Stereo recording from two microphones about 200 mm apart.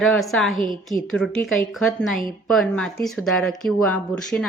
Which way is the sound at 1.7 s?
Centre (ahead or behind).